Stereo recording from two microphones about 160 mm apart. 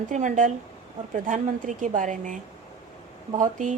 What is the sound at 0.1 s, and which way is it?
A woman's voice, 50° right (ahead or behind).